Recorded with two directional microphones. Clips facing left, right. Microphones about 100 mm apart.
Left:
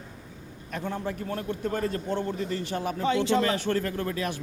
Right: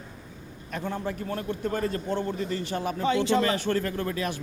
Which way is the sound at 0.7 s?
25° right (ahead or behind).